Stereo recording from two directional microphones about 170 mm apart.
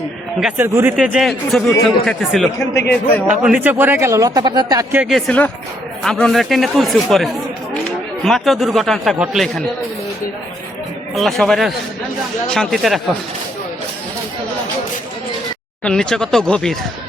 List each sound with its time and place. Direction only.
0.3 s a man's voice: 5° right (ahead or behind)
3.4 s speech: 10° right (ahead or behind)
4.9 s speech: centre (ahead or behind)
11.1 s speech: centre (ahead or behind)
15.8 s speech: 5° left (ahead or behind)